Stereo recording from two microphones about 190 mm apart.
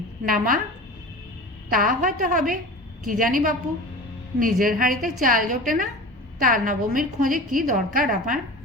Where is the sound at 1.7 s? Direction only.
45° right (ahead or behind).